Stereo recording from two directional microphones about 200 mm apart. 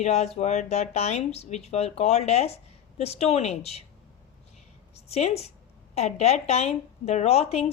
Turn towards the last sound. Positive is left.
turn(degrees=30)  # may be behind; listen again after turning